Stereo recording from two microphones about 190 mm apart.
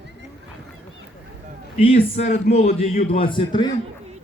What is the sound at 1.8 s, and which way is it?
A man's voice, 35° left (ahead or behind).